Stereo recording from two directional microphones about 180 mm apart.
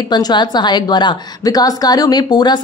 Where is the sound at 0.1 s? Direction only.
25° left (ahead or behind).